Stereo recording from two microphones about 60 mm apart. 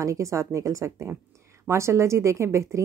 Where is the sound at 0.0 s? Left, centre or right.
Right.